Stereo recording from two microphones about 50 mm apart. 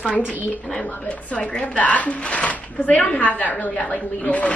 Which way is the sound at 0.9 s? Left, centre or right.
Left.